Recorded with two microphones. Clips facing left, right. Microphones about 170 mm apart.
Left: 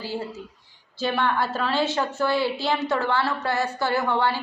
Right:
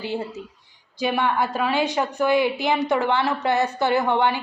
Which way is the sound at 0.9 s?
15° right (ahead or behind).